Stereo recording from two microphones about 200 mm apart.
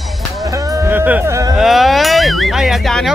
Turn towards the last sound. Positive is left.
turn(degrees=0)  # may be behind; listen again after turning